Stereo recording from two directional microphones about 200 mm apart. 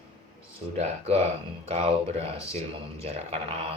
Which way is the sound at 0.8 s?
30° right (ahead or behind).